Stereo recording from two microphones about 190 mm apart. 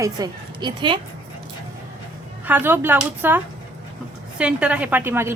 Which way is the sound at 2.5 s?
10° right (ahead or behind).